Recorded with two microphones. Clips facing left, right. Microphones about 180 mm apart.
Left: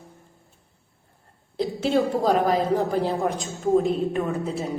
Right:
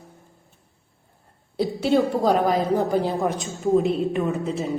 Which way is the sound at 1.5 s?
Centre (ahead or behind).